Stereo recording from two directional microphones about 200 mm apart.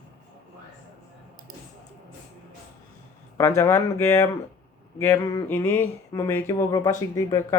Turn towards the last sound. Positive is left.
turn(degrees=15)  # may be behind; listen again after turning